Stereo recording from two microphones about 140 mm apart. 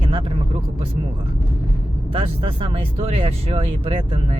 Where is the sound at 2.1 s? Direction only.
40° right (ahead or behind).